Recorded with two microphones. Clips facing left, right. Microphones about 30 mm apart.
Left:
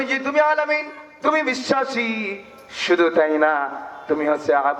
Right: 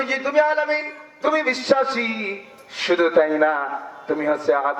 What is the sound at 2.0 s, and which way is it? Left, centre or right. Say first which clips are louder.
Speech: left 1 dB; centre.